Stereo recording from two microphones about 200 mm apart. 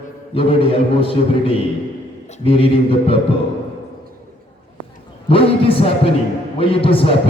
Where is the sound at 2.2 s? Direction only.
30° left (ahead or behind).